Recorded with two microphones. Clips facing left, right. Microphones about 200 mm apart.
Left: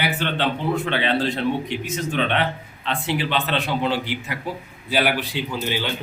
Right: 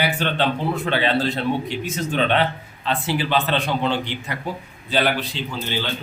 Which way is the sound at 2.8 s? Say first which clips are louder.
Right 1 dB; 35° right (ahead or behind).